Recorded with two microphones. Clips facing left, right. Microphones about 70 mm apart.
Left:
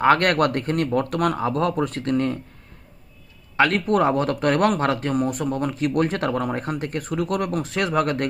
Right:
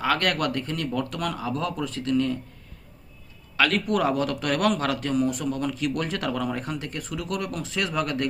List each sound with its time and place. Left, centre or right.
0.0 s speech: left
3.6 s speech: left